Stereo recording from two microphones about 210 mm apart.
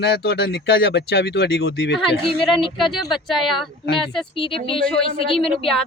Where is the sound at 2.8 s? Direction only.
Centre (ahead or behind).